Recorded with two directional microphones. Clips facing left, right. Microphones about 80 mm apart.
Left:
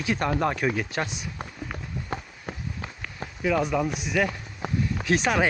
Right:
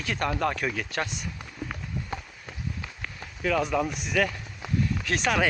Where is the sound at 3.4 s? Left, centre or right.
Centre.